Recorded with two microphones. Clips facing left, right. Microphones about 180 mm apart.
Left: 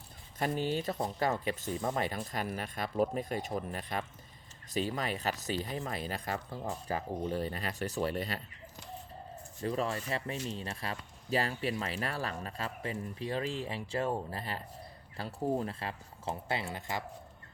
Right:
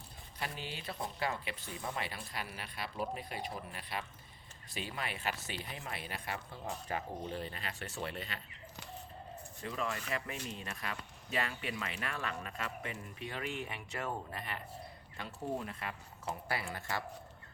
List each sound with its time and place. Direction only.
0.3 s speech: 45° left (ahead or behind)
9.6 s speech: 35° left (ahead or behind)